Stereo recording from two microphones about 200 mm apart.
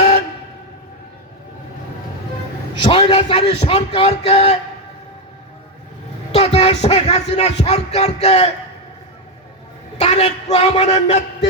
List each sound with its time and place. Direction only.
2.8 s a man's voice: 25° left (ahead or behind)
6.3 s music: 30° left (ahead or behind)
10.0 s a man's voice: 30° left (ahead or behind)